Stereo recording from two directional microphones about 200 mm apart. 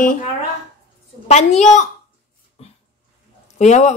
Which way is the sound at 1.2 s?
35° left (ahead or behind).